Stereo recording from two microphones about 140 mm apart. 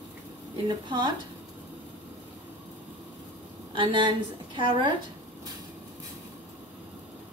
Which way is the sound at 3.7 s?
35° right (ahead or behind).